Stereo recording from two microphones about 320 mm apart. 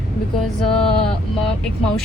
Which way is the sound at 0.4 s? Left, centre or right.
Centre.